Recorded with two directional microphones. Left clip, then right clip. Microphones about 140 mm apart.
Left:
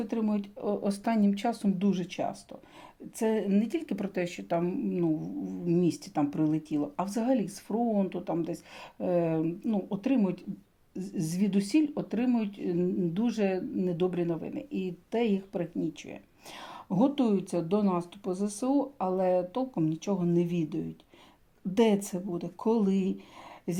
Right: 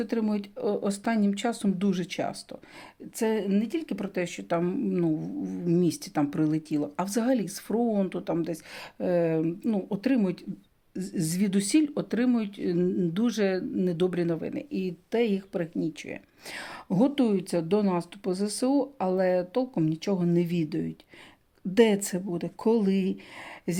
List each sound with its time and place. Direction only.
0.0 s speech: 35° right (ahead or behind)
1.8 s speech: 35° right (ahead or behind)
3.2 s speech: 15° right (ahead or behind)
4.7 s speech: 45° right (ahead or behind)
18.9 s speech: 35° right (ahead or behind)
21.8 s speech: 35° right (ahead or behind)